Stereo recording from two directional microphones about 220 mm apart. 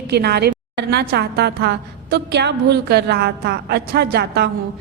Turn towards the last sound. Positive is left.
turn(degrees=-45)  # may be behind; listen again after turning